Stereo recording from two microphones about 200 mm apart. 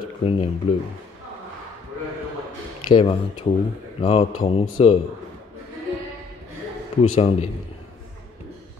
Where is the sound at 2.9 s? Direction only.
25° left (ahead or behind).